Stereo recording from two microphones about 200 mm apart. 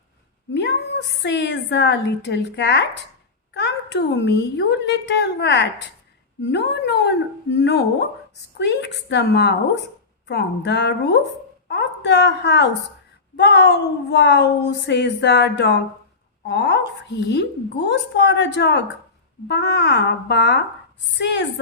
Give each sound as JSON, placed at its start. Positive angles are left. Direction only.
{"t": 1.2, "sound": "a woman's voice", "side_deg": 60}